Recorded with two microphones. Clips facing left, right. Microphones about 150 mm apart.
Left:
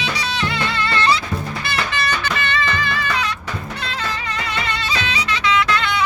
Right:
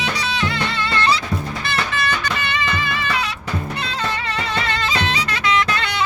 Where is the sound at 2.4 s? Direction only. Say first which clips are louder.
Left 1 dB; 10° right (ahead or behind).